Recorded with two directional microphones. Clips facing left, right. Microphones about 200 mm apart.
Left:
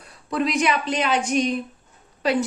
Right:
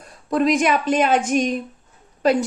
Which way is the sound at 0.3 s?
45° right (ahead or behind).